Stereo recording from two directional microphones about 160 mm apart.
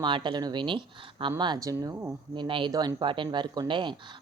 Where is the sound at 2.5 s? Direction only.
30° right (ahead or behind).